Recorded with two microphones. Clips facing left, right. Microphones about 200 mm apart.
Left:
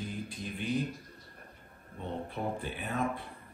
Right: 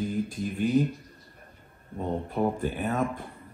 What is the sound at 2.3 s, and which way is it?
Speech, 50° right (ahead or behind).